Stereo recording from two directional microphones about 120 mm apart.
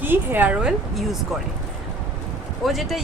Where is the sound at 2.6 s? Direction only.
Centre (ahead or behind).